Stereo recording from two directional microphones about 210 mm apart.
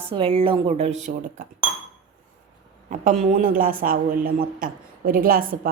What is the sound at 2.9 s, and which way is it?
A woman's voice, 35° right (ahead or behind).